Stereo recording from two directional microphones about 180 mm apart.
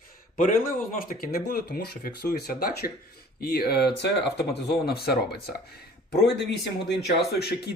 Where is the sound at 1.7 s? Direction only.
55° left (ahead or behind).